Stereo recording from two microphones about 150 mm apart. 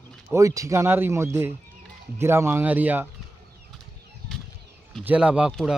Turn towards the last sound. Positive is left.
turn(degrees=-5)  # may be behind; listen again after turning